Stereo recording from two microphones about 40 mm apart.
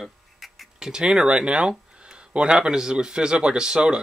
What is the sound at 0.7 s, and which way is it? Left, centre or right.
Speech, centre.